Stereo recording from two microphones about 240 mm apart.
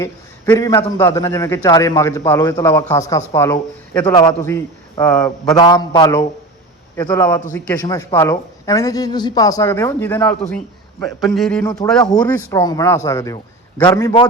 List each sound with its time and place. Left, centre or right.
0.0 s speech: centre
12.2 s speech: centre